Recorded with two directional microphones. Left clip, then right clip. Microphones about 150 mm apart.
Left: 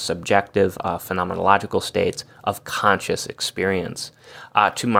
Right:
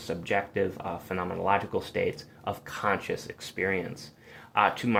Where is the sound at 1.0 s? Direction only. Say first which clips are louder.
Left 9 dB; 25° left (ahead or behind).